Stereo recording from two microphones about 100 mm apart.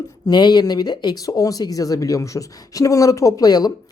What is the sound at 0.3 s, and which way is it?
Speech, 45° left (ahead or behind).